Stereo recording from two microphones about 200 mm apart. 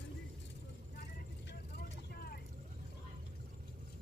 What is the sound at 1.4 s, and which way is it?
Vehicle, 50° left (ahead or behind).